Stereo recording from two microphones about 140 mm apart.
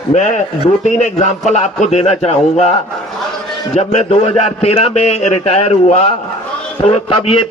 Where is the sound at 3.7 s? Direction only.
50° left (ahead or behind).